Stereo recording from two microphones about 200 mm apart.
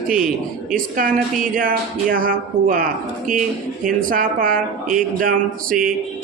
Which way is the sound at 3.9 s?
45° right (ahead or behind).